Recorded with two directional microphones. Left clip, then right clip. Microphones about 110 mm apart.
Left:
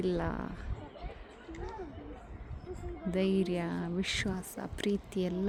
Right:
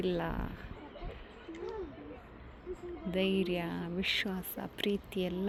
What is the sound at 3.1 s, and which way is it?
Speech, 50° left (ahead or behind).